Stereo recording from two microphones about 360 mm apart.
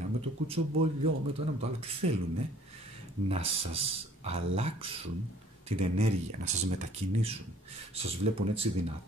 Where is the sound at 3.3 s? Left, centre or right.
Centre.